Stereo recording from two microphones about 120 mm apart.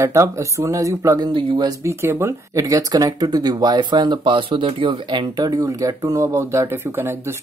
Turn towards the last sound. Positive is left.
turn(degrees=-20)  # may be behind; listen again after turning